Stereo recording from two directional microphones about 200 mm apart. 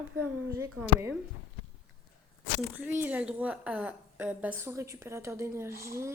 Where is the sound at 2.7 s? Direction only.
10° right (ahead or behind).